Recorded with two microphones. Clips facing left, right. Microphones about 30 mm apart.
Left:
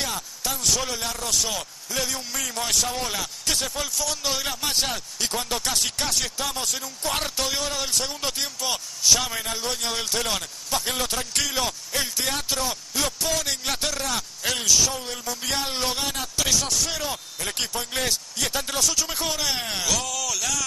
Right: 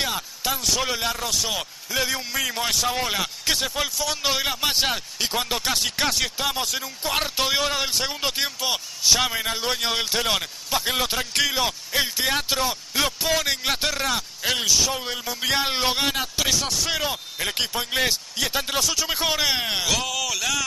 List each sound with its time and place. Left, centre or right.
0.0 s a sound: centre
0.7 s speech: right
1.3 s speech: centre
1.6 s speech: right
7.3 s speech: right
14.9 s speech: right
16.4 s speech: centre